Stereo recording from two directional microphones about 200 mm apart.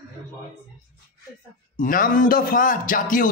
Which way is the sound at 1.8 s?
40° left (ahead or behind).